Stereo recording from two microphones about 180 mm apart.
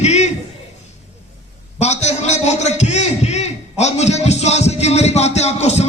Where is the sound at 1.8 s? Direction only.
40° left (ahead or behind).